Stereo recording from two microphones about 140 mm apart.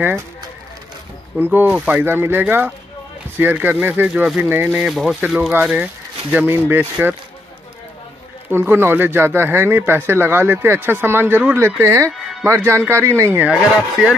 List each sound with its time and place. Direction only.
1.4 s speech: 15° right (ahead or behind)
8.5 s speech: 15° right (ahead or behind)
12.1 s music: centre (ahead or behind)
12.4 s speech: 20° right (ahead or behind)